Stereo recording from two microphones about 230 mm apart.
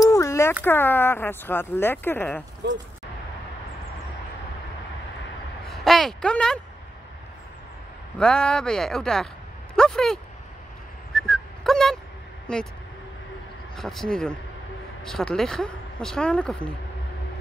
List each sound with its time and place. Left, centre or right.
0.0 s a sound: centre
0.7 s speech: centre
2.6 s speech: right
5.7 s speech: centre
8.2 s speech: centre
11.1 s a sound: centre
12.5 s speech: centre
13.7 s speech: centre